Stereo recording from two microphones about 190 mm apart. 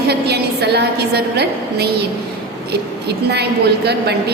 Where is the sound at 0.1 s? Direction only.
60° right (ahead or behind).